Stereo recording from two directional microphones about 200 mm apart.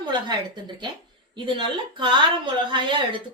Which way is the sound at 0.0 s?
20° right (ahead or behind).